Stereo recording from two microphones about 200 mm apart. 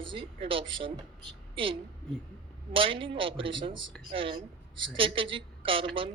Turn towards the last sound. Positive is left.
turn(degrees=-25)  # may be behind; listen again after turning